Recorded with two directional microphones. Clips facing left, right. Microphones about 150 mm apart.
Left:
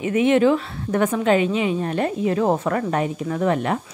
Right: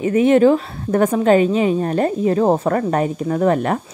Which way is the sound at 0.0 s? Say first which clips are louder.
Right 4 dB; 40° right (ahead or behind).